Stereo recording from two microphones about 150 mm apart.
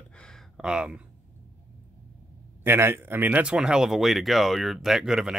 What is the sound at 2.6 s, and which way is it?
Speech, 15° right (ahead or behind).